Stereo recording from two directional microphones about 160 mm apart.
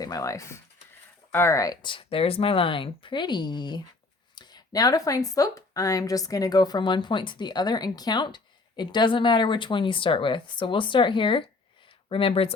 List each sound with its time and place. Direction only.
0.0 s speech: 20° left (ahead or behind)